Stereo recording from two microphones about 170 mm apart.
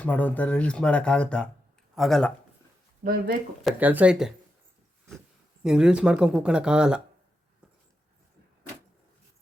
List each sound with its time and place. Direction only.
0.0 s speech: 10° left (ahead or behind)
3.0 s speech: 55° right (ahead or behind)
3.6 s speech: 5° right (ahead or behind)
5.6 s speech: 5° right (ahead or behind)